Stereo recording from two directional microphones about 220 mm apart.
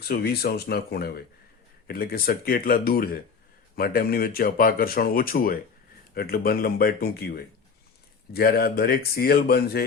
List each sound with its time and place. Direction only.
0.0 s speech: 45° left (ahead or behind)